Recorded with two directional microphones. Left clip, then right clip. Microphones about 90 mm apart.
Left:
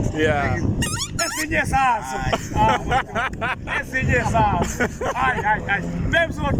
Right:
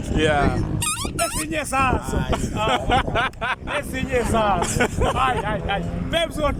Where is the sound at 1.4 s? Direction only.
25° right (ahead or behind).